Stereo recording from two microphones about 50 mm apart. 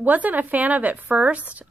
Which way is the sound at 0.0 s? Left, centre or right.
Right.